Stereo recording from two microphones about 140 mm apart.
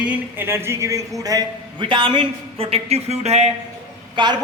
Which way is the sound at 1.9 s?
35° right (ahead or behind).